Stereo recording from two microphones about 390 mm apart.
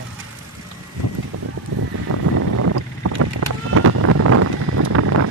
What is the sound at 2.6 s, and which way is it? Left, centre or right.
Boat, right.